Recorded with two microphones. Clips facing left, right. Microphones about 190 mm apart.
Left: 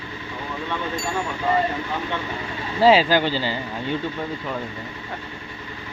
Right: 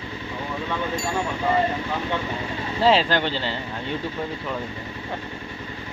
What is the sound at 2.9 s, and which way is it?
Speech, 5° left (ahead or behind).